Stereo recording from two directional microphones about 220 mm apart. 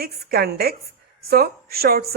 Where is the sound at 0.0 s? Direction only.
45° right (ahead or behind).